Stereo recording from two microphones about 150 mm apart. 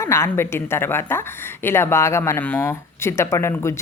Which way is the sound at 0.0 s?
15° left (ahead or behind).